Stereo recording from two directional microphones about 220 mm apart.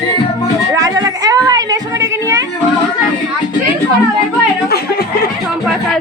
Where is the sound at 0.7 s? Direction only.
15° right (ahead or behind).